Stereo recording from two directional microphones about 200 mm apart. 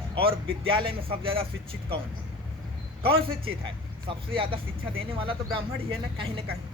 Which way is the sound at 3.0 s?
25° right (ahead or behind).